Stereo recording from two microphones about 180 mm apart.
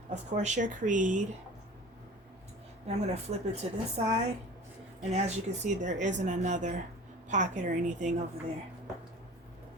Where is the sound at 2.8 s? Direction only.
35° right (ahead or behind).